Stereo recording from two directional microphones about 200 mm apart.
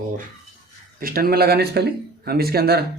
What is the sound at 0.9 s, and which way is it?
Speech, 45° right (ahead or behind).